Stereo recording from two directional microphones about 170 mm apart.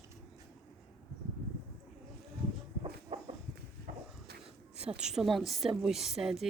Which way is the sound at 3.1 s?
40° right (ahead or behind).